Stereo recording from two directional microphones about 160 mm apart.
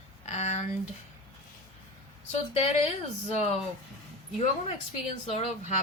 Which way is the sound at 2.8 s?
40° left (ahead or behind).